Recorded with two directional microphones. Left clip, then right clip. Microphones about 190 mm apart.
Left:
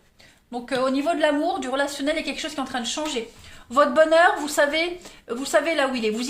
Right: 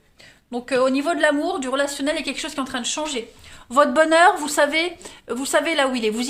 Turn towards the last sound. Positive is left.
turn(degrees=-40)  # may be behind; listen again after turning